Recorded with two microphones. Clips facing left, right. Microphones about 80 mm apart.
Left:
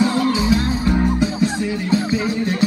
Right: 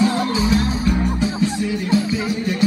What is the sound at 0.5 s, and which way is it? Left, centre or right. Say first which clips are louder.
Music: left 1 dB; left.